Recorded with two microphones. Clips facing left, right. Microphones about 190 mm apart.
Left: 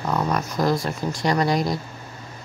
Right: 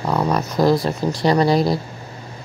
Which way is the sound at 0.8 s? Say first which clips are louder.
Right 5 dB; 30° right (ahead or behind).